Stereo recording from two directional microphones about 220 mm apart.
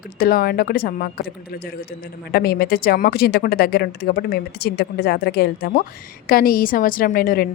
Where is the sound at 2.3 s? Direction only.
45° left (ahead or behind).